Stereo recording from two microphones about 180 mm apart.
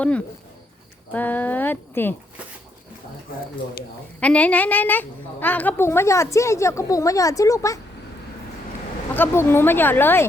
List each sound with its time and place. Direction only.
1.1 s a woman's voice: 10° left (ahead or behind)
4.2 s a woman's voice: 5° left (ahead or behind)
9.1 s a woman's voice: 10° left (ahead or behind)